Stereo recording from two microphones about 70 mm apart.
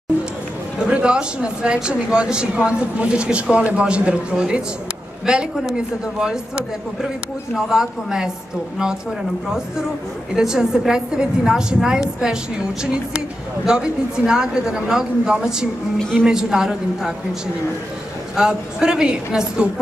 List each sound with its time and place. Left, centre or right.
0.7 s speech: centre
10.3 s speech: centre